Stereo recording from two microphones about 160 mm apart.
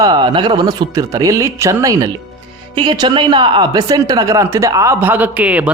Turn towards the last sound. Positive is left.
turn(degrees=-10)  # may be behind; listen again after turning